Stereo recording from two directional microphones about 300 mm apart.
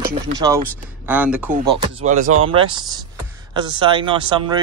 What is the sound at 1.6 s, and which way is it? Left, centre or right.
Speech, centre.